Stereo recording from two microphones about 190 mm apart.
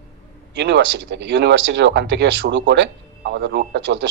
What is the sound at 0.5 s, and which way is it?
Speech, 65° right (ahead or behind).